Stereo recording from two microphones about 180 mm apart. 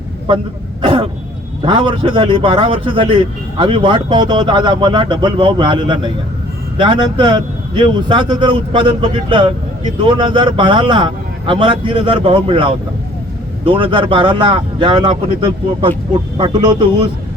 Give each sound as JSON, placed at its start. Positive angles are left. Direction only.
{"t": 0.8, "sound": "throat clearing", "side_deg": -30}
{"t": 1.6, "sound": "a man's voice", "side_deg": -30}